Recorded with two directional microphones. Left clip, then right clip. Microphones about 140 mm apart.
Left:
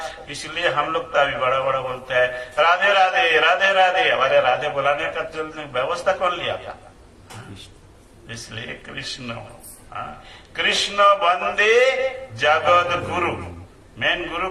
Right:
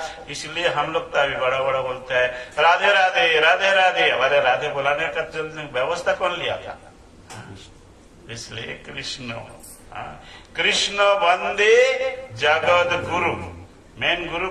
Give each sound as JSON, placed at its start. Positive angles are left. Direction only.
{"t": 0.0, "sound": "a man's voice", "side_deg": 25}
{"t": 8.3, "sound": "a man's voice", "side_deg": 20}